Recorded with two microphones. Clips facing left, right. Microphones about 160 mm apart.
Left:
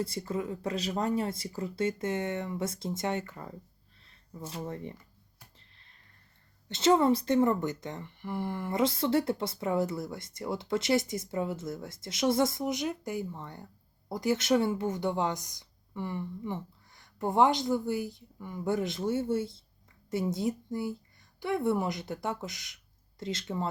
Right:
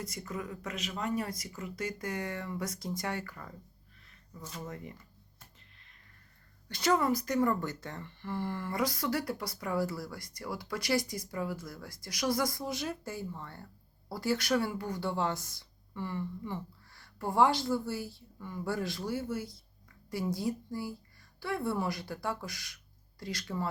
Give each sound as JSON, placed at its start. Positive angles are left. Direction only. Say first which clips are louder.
{"t": 0.0, "sound": "speech", "louder": "left 6 dB", "side_deg": 30}
{"t": 5.5, "sound": "a sound", "louder": "even", "side_deg": 30}
{"t": 6.7, "sound": "speech", "louder": "left 5 dB", "side_deg": 25}